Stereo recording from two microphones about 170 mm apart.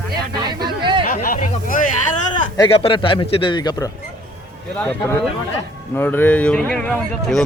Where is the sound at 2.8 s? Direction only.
30° left (ahead or behind).